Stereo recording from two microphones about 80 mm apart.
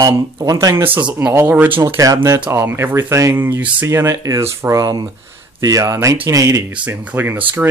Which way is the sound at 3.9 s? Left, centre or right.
Right.